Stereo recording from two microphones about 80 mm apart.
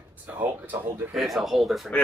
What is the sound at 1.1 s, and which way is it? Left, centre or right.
Speech, centre.